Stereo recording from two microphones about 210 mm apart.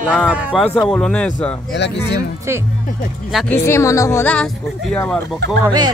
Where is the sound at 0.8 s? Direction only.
5° left (ahead or behind).